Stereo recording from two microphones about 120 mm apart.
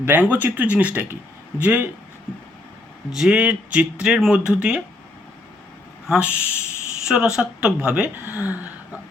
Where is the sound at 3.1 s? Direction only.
5° right (ahead or behind).